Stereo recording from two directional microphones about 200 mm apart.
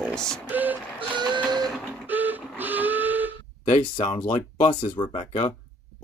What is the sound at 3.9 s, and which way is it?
Speech, 25° left (ahead or behind).